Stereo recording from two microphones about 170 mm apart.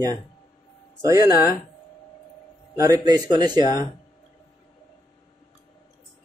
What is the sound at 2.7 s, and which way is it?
Speech, 20° right (ahead or behind).